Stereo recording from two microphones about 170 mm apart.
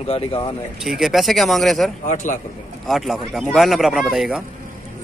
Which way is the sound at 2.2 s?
50° left (ahead or behind).